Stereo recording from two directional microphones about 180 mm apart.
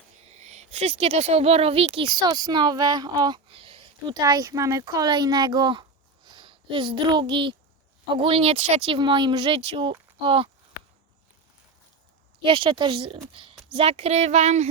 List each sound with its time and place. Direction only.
0.3 s speech: 40° right (ahead or behind)
12.4 s speech: 30° right (ahead or behind)